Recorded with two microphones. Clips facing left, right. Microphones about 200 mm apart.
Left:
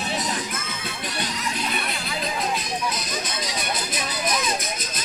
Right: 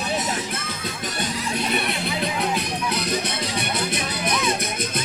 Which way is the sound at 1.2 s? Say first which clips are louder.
Right 4 dB; 60° right (ahead or behind).